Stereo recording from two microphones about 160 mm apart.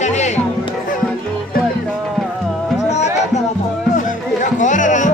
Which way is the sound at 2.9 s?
45° left (ahead or behind).